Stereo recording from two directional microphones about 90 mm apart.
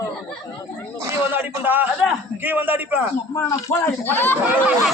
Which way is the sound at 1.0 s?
25° right (ahead or behind).